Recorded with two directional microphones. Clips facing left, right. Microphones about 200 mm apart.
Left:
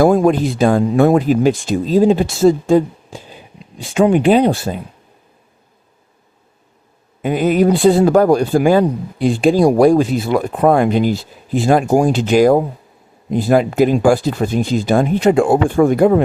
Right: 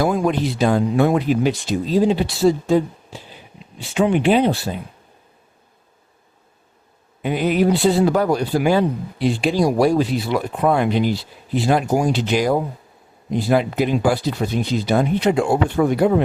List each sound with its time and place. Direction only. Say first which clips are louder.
0.0 s a man's voice: left 7 dB; 45° left (ahead or behind)
7.2 s a man's voice: left 4 dB; 45° left (ahead or behind)